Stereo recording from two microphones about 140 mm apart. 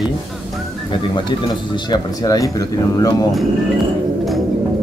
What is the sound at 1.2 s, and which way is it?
Speech, 35° left (ahead or behind).